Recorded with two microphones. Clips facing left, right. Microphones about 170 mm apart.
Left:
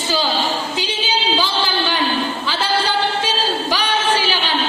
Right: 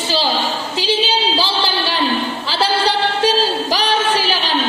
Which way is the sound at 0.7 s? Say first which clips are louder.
Right 4 dB; 35° right (ahead or behind).